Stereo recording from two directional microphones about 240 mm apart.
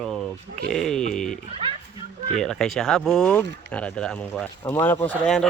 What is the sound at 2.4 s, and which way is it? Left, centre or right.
Speech, centre.